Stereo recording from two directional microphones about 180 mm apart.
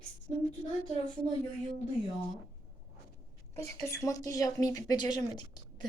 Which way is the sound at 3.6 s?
15° left (ahead or behind).